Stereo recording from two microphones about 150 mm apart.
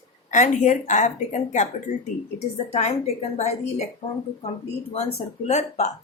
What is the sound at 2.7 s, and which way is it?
A woman's voice, 45° left (ahead or behind).